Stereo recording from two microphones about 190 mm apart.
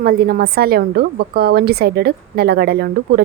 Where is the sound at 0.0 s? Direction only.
50° right (ahead or behind).